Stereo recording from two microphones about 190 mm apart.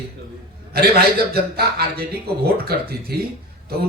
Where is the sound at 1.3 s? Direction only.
55° right (ahead or behind).